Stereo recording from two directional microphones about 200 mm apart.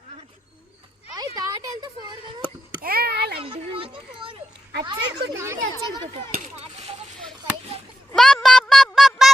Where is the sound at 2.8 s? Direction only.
50° right (ahead or behind).